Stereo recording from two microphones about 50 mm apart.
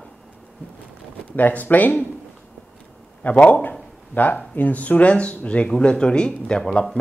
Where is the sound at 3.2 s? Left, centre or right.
Left.